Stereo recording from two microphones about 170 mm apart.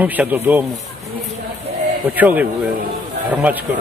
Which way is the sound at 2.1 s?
10° right (ahead or behind).